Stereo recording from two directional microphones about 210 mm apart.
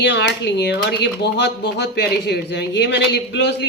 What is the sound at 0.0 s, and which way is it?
A woman's voice, 55° left (ahead or behind).